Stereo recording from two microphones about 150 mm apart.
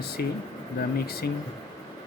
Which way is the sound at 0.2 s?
90° left.